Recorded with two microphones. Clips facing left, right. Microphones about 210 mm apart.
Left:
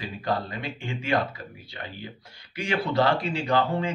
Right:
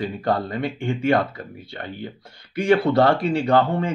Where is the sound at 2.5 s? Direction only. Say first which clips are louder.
Right 8 dB; 55° right (ahead or behind).